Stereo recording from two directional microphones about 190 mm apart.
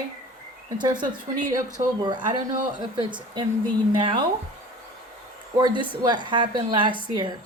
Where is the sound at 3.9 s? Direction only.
25° right (ahead or behind).